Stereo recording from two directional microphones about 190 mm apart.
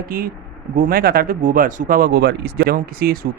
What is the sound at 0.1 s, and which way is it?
Speech, 50° right (ahead or behind).